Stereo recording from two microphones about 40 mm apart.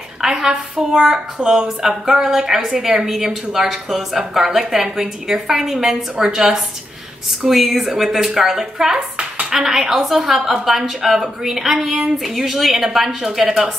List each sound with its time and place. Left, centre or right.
0.2 s a woman's voice: centre